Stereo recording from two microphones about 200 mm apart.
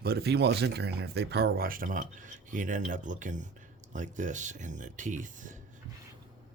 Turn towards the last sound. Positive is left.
turn(degrees=-40)  # may be behind; listen again after turning